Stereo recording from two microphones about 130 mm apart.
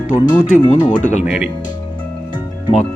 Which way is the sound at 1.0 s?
75° left (ahead or behind).